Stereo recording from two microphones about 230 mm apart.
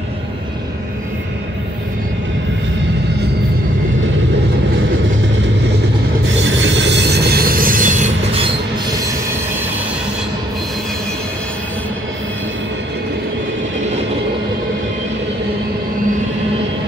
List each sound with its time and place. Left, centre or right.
6.3 s train: right